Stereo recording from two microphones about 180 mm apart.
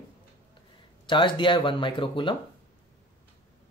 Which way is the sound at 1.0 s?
25° left (ahead or behind).